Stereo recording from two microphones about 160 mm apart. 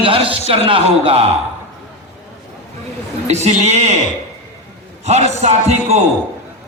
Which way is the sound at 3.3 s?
45° right (ahead or behind).